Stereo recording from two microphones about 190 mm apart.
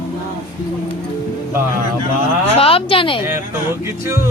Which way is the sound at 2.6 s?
30° left (ahead or behind).